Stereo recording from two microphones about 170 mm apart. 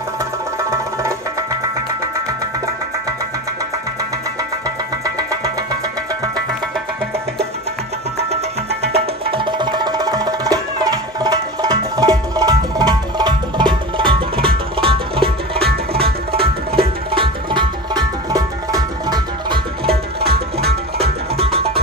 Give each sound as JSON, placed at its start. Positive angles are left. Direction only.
{"t": 0.6, "sound": "music", "side_deg": -15}
{"t": 5.0, "sound": "music", "side_deg": -20}
{"t": 8.9, "sound": "music", "side_deg": -30}